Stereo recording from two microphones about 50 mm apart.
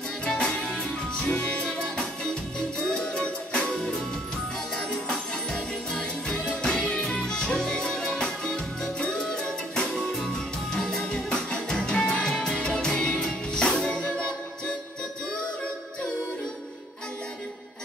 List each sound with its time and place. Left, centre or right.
0.2 s music: centre
1.2 s music: left
2.9 s music: centre